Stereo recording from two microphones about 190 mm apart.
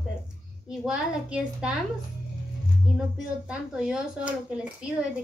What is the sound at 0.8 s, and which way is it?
Speech, 5° right (ahead or behind).